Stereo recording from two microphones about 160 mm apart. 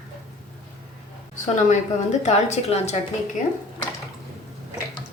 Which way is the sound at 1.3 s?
45° left (ahead or behind).